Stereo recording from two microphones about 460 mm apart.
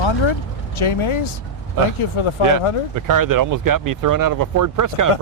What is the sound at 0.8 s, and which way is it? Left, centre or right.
Speech, left.